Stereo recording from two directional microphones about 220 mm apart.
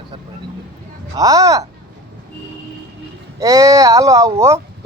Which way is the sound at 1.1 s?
15° right (ahead or behind).